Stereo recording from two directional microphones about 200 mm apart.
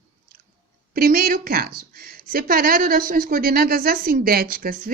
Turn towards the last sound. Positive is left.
turn(degrees=-45)  # may be behind; listen again after turning